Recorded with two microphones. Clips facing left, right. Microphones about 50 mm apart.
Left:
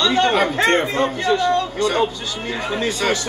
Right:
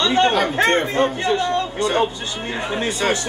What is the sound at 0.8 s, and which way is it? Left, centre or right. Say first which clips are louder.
Speech: right 1 dB; centre.